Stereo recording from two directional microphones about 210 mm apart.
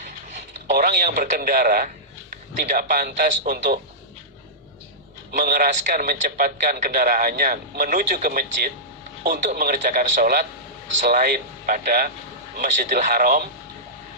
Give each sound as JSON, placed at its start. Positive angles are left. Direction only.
{"t": 0.7, "sound": "a man's voice", "side_deg": -40}
{"t": 5.4, "sound": "a man's voice", "side_deg": -40}